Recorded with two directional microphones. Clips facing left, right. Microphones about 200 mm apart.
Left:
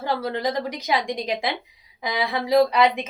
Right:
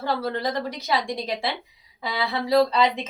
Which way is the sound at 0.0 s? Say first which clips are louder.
Left 1 dB; 15° left (ahead or behind).